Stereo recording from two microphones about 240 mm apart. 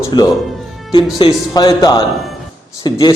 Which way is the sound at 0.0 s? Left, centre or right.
Centre.